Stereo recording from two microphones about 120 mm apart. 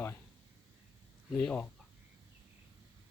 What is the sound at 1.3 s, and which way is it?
Speech, 10° left (ahead or behind).